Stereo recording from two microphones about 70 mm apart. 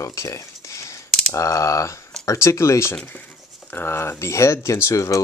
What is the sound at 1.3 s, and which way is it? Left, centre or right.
Speech, left.